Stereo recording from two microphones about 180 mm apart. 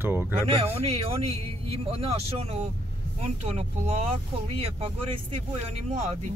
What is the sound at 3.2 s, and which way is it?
Speech, 35° right (ahead or behind).